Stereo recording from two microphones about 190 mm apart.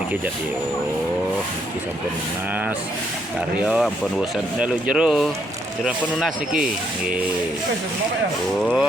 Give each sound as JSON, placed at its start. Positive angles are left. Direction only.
{"t": 3.7, "sound": "speech", "side_deg": -5}
{"t": 8.6, "sound": "speech", "side_deg": 0}